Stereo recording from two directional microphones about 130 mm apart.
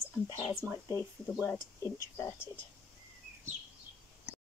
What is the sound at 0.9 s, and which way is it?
Speech, 25° left (ahead or behind).